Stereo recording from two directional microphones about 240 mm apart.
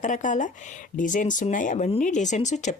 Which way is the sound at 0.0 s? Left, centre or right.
Left.